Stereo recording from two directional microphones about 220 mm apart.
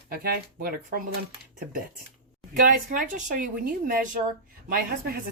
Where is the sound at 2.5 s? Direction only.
40° right (ahead or behind).